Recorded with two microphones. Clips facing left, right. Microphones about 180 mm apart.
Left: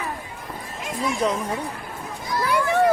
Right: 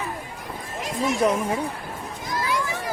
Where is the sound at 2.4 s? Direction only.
60° left (ahead or behind).